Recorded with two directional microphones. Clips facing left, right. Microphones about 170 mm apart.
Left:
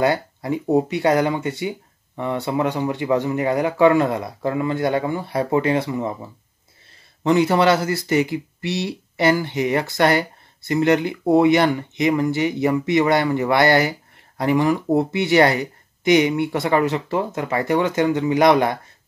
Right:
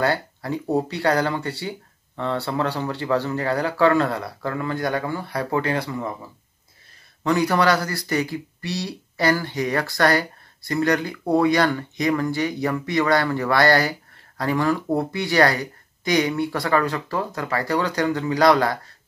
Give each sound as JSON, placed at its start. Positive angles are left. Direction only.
{"t": 0.0, "sound": "speech", "side_deg": 20}
{"t": 7.2, "sound": "speech", "side_deg": 25}